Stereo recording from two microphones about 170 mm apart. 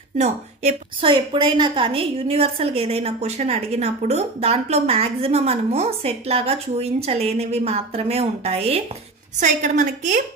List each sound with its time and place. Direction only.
0.2 s a woman's voice: 40° right (ahead or behind)